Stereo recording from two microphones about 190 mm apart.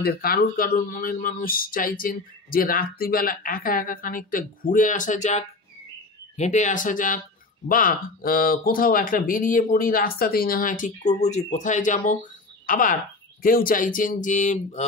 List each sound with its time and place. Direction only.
0.0 s speech: 50° left (ahead or behind)